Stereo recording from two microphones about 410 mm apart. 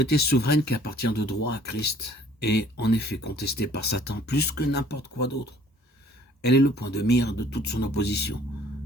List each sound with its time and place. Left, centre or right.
0.0 s speech: left
6.4 s speech: left